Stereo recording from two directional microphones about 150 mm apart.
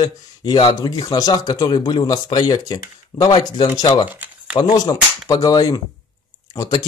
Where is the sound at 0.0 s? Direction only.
30° left (ahead or behind).